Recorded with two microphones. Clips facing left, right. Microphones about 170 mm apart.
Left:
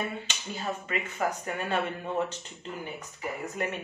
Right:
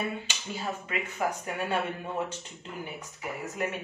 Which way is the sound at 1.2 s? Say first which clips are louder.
Even; 5° right (ahead or behind).